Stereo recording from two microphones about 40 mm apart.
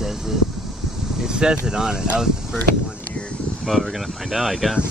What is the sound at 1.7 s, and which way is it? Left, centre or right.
Speech, centre.